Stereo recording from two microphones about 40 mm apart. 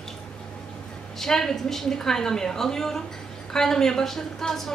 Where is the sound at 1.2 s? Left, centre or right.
Centre.